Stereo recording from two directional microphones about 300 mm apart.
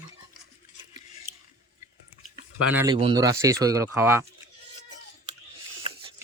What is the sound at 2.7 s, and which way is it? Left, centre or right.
Speech, centre.